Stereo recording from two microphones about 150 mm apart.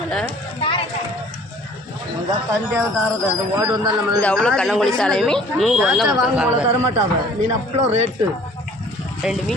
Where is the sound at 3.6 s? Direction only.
20° right (ahead or behind).